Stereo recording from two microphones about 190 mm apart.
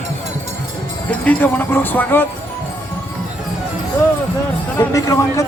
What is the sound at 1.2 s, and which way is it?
Speech, 10° left (ahead or behind).